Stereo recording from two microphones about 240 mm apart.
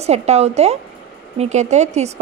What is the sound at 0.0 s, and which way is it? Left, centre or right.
A woman's voice, right.